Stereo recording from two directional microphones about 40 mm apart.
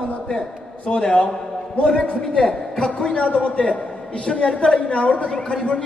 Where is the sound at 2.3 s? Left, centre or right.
Left.